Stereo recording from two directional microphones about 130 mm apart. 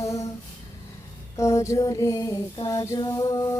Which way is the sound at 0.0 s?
25° left (ahead or behind).